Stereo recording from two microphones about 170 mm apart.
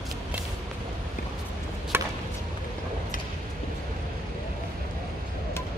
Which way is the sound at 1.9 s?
15° right (ahead or behind).